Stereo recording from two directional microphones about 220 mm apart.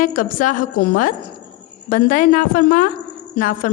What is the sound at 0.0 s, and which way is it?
A woman's voice, 40° left (ahead or behind).